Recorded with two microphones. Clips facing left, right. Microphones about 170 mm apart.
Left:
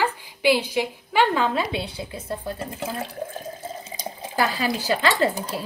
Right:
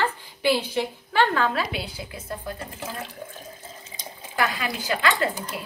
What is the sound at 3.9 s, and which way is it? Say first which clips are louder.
Speech: left 3 dB; 30° left (ahead or behind).